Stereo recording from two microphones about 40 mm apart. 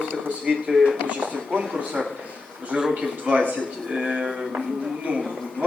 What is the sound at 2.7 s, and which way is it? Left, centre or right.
Speech, right.